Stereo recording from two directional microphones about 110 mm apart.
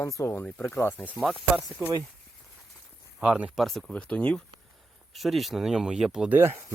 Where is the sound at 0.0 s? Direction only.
25° left (ahead or behind).